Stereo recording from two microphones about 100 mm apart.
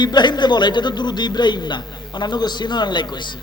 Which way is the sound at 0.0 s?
50° left (ahead or behind).